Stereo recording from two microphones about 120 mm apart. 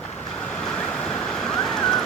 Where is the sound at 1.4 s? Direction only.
5° left (ahead or behind).